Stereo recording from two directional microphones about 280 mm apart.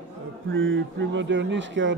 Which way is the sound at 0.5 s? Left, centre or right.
Right.